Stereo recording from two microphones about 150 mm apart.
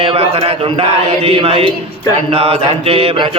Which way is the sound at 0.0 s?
40° right (ahead or behind).